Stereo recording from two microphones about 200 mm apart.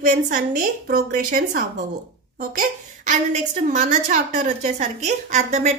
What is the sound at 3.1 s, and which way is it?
A woman's voice, 40° right (ahead or behind).